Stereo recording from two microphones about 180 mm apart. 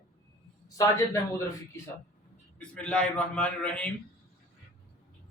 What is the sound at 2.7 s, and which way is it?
A man's voice, 5° left (ahead or behind).